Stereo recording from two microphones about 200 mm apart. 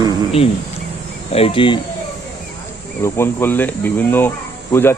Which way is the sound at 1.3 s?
25° left (ahead or behind).